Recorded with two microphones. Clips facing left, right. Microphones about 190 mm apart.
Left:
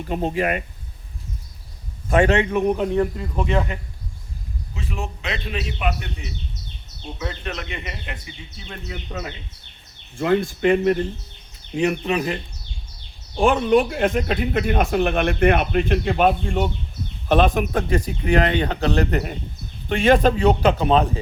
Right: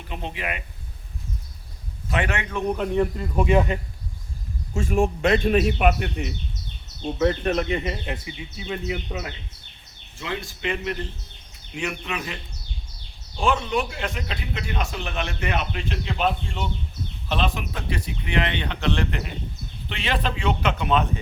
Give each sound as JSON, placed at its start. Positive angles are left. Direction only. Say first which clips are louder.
{"t": 0.1, "sound": "speech", "louder": "left 9 dB", "side_deg": 45}
{"t": 2.2, "sound": "a man's voice", "louder": "left 10 dB", "side_deg": 30}
{"t": 2.5, "sound": "a man's voice", "louder": "left 5 dB", "side_deg": 15}
{"t": 2.9, "sound": "speech", "louder": "left 1 dB", "side_deg": -5}
{"t": 4.7, "sound": "a man's voice", "louder": "right 9 dB", "side_deg": -50}
{"t": 8.5, "sound": "speech", "louder": "right 6 dB", "side_deg": -5}
{"t": 10.2, "sound": "speech", "louder": "left 12 dB", "side_deg": 50}
{"t": 11.7, "sound": "a man's voice", "louder": "left 9 dB", "side_deg": 35}
{"t": 13.3, "sound": "a man's voice", "louder": "left 7 dB", "side_deg": 50}